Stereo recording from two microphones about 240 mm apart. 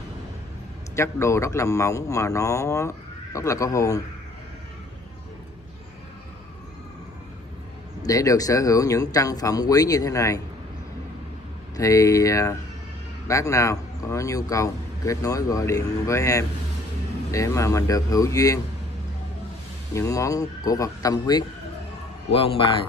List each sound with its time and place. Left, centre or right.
0.9 s speech: centre
8.0 s speech: centre
11.7 s speech: centre
19.9 s a man's voice: centre